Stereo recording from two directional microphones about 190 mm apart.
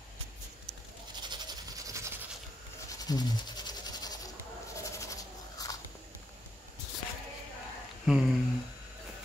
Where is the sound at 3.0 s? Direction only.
20° left (ahead or behind).